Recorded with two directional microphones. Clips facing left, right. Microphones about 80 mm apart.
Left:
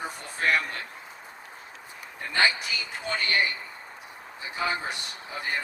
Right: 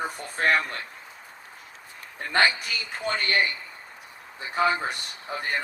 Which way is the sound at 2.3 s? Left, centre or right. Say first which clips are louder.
Right 2 dB; right.